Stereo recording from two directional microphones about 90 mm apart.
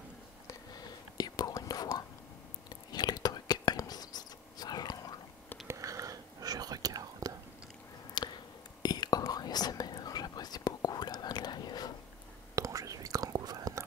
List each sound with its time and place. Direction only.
0.5 s whispering: 45° left (ahead or behind)
5.7 s whispering: 40° right (ahead or behind)
8.2 s a sound: 50° left (ahead or behind)
8.8 s whispering: 50° left (ahead or behind)
12.5 s whispering: 40° right (ahead or behind)